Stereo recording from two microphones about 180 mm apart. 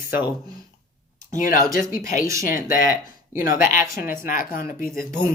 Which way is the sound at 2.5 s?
50° left (ahead or behind).